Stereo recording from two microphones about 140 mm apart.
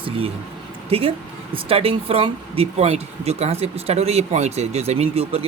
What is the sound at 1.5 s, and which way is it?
Speech, 45° right (ahead or behind).